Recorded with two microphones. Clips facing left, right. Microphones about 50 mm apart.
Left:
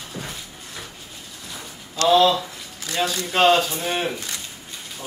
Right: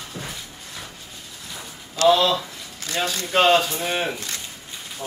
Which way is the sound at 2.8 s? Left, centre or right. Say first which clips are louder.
Left 1 dB; right.